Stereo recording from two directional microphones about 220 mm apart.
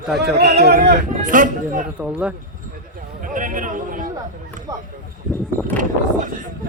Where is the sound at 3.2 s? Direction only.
35° right (ahead or behind).